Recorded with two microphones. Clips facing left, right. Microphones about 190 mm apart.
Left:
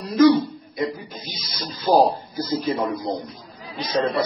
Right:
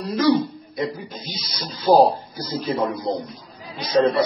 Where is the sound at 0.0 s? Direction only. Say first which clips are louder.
Left 3 dB; centre (ahead or behind).